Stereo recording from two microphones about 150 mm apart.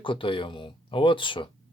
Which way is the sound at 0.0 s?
35° left (ahead or behind).